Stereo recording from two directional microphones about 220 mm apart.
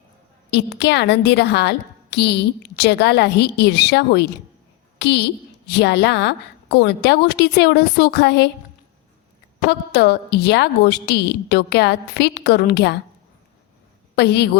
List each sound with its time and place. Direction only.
0.5 s a woman's voice: 50° left (ahead or behind)
9.6 s a woman's voice: 50° left (ahead or behind)
14.2 s a woman's voice: 50° left (ahead or behind)